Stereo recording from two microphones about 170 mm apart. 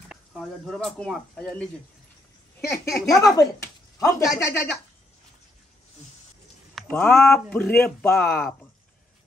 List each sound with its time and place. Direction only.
0.1 s speech: centre (ahead or behind)
2.7 s speech: 15° left (ahead or behind)
6.7 s speech: 10° left (ahead or behind)